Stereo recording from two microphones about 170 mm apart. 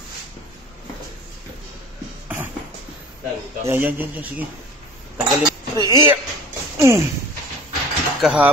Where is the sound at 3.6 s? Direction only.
10° right (ahead or behind).